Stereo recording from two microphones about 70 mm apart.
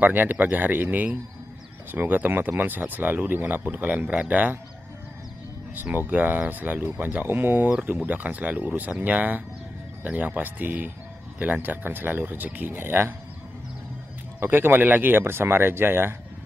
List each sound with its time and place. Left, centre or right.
0.0 s speech: right
5.8 s speech: right
14.4 s speech: right